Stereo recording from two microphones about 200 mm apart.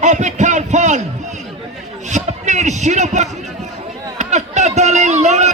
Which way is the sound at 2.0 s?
35° right (ahead or behind).